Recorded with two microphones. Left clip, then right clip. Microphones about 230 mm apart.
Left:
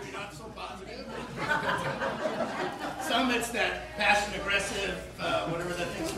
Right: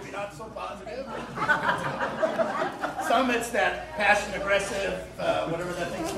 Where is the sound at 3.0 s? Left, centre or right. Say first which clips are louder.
Right 4 dB; centre.